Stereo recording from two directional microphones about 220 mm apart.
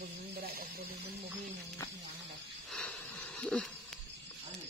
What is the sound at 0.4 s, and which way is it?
Snake, 45° right (ahead or behind).